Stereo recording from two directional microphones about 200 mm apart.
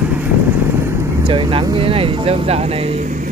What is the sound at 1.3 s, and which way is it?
Speech, 25° right (ahead or behind).